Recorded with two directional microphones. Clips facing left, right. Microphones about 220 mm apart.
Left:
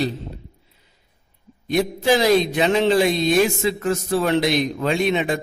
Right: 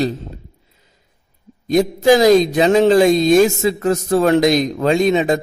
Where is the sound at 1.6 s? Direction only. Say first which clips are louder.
Right 6 dB; 40° right (ahead or behind).